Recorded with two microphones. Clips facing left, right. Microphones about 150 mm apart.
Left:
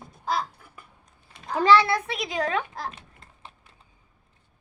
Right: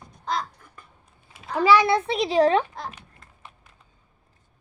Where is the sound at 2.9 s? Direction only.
30° left (ahead or behind).